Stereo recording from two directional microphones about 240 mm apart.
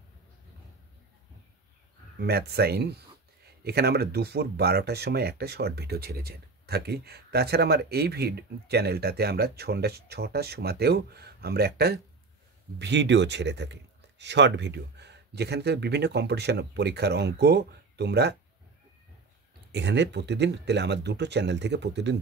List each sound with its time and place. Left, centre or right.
2.1 s speech: right
19.7 s speech: right